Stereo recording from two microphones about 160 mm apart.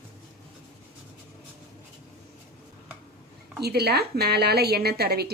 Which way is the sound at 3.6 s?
90° right.